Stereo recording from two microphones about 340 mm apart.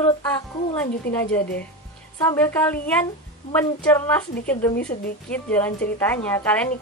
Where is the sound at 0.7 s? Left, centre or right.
Centre.